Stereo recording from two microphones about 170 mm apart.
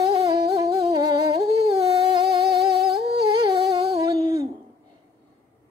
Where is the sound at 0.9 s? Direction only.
20° right (ahead or behind).